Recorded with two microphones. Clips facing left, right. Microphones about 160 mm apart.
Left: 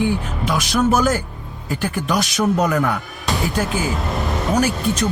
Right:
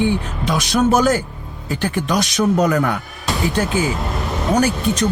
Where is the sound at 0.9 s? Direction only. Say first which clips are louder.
Right 3 dB; 5° left (ahead or behind).